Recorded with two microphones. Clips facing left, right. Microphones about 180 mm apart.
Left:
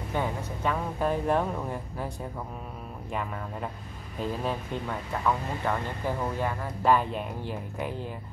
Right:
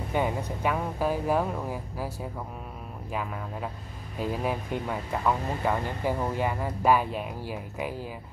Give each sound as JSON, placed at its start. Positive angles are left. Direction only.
{"t": 0.1, "sound": "speech", "side_deg": -15}